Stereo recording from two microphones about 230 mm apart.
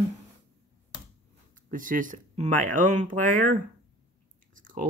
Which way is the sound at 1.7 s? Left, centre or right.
Right.